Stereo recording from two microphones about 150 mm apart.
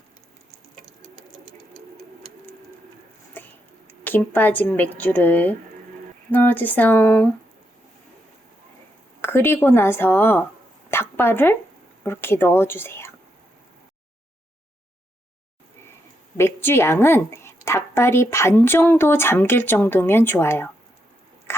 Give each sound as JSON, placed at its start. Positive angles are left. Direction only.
{"t": 3.4, "sound": "a sound", "side_deg": 10}
{"t": 4.0, "sound": "a woman's voice", "side_deg": 10}
{"t": 9.2, "sound": "a woman's voice", "side_deg": 15}
{"t": 10.9, "sound": "a sound", "side_deg": 15}
{"t": 12.0, "sound": "a woman's voice", "side_deg": 15}
{"t": 16.4, "sound": "a woman's voice", "side_deg": 15}